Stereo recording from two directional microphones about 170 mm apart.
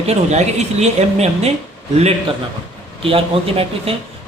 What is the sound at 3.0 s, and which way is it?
Speech, 35° right (ahead or behind).